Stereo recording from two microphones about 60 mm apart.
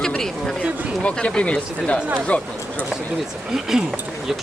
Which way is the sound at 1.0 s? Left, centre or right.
Centre.